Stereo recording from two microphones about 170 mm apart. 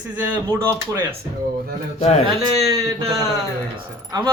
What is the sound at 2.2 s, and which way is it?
Speech, 25° right (ahead or behind).